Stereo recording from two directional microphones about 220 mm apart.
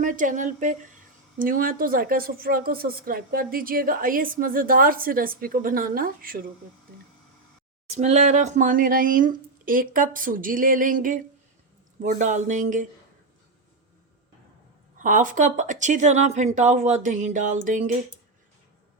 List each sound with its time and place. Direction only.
0.0 s a woman's voice: 35° right (ahead or behind)
7.9 s a woman's voice: 30° right (ahead or behind)
15.0 s a woman's voice: 35° right (ahead or behind)